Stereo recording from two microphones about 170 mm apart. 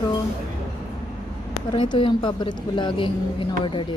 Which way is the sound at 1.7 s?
30° left (ahead or behind).